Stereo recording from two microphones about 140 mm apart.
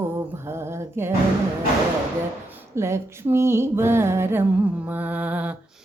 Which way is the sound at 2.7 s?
20° right (ahead or behind).